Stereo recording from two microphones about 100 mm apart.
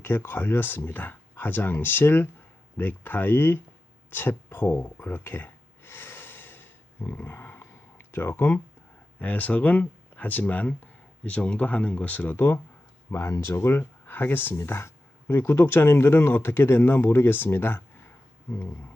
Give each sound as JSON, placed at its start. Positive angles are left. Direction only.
{"t": 0.0, "sound": "speech", "side_deg": 20}
{"t": 4.1, "sound": "a sound", "side_deg": 20}
{"t": 9.1, "sound": "speech", "side_deg": 15}